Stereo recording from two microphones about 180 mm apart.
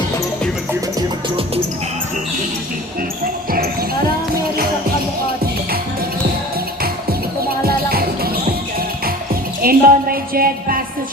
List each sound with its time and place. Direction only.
3.5 s basketball bounce: 55° right (ahead or behind)
7.6 s music: 55° right (ahead or behind)